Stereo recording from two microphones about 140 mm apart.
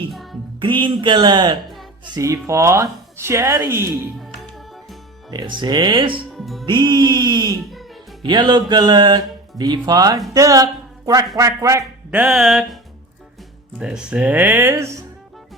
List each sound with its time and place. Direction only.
0.1 s music: centre (ahead or behind)
0.6 s speech: 35° right (ahead or behind); by 3.9 s 15° right (ahead or behind)
5.3 s speech: 30° right (ahead or behind)
6.3 s music: centre (ahead or behind)
6.7 s a man's voice: 35° right (ahead or behind)
12.1 s music: 5° right (ahead or behind)
13.7 s speech: 5° right (ahead or behind)